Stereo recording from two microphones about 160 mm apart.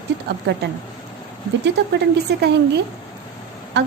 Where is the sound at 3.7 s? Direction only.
90° right.